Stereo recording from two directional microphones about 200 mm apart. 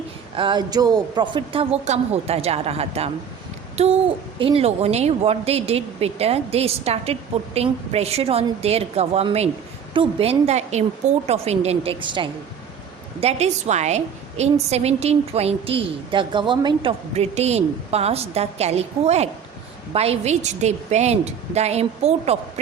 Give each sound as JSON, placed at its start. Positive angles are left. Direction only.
{"t": 0.3, "sound": "a woman's voice", "side_deg": -25}